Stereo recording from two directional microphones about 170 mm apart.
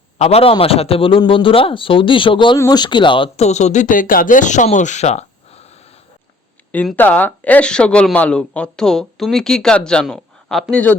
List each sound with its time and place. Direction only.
0.2 s a man's voice: 35° left (ahead or behind)
6.7 s speech: 10° left (ahead or behind)